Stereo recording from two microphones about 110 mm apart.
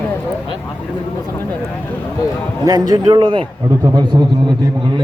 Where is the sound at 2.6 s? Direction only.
35° right (ahead or behind).